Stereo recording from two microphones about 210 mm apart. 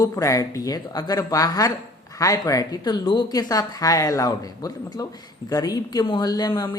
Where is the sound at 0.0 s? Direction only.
15° left (ahead or behind).